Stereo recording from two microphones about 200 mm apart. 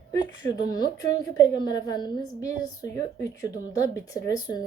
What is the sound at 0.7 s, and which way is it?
A woman's voice, 20° left (ahead or behind).